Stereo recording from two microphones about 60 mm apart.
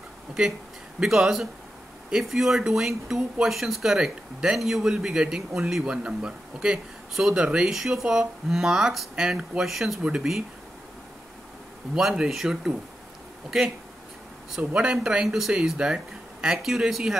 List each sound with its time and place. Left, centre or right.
0.4 s speech: centre
7.7 s speech: centre
11.9 s speech: centre
14.6 s speech: right
15.2 s speech: centre